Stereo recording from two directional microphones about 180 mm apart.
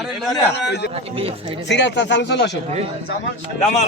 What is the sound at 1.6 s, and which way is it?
Speech, 75° left (ahead or behind).